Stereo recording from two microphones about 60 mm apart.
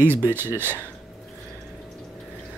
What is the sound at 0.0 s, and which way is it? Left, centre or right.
Speech, right.